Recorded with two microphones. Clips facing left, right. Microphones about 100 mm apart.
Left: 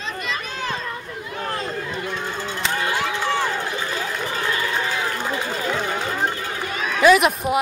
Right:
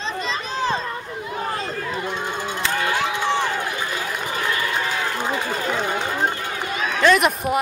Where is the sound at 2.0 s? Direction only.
20° right (ahead or behind).